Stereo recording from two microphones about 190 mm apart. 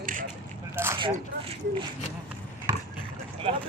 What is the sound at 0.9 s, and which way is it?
Speech, 25° right (ahead or behind).